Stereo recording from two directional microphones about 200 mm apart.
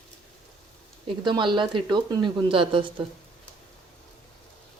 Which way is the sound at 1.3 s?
25° right (ahead or behind).